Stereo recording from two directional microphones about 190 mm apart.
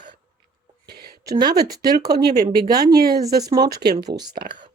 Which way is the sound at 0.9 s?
55° right (ahead or behind).